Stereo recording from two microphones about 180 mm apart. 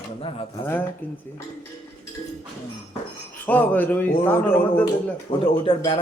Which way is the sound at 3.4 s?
10° left (ahead or behind).